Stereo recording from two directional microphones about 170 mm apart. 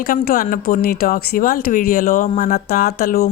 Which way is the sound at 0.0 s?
60° left (ahead or behind).